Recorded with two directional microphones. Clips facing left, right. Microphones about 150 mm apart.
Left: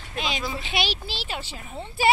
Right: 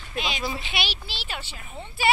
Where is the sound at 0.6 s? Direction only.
40° left (ahead or behind).